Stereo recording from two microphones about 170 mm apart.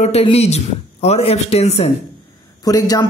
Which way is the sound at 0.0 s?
35° left (ahead or behind).